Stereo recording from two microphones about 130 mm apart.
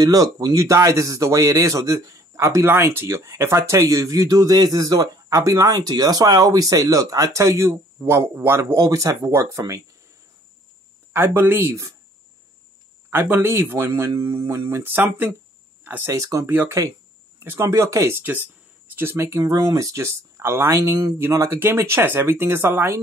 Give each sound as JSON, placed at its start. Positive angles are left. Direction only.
{"t": 0.0, "sound": "speech", "side_deg": -25}
{"t": 11.1, "sound": "speech", "side_deg": -15}
{"t": 13.1, "sound": "speech", "side_deg": -20}
{"t": 16.2, "sound": "speech", "side_deg": -25}